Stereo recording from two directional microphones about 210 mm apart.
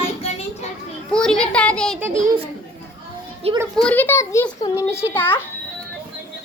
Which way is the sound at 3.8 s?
5° left (ahead or behind).